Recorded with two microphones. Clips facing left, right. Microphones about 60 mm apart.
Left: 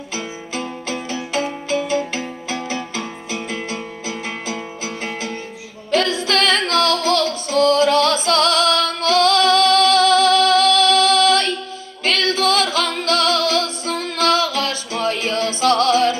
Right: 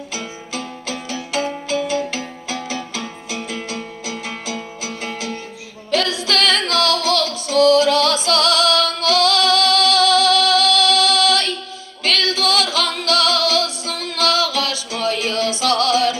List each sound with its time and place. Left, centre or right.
0.1 s music: left